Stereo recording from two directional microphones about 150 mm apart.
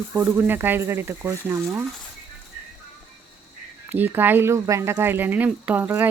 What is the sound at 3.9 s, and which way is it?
Speech, 15° right (ahead or behind).